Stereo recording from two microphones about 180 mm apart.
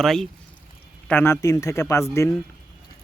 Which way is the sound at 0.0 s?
Centre (ahead or behind).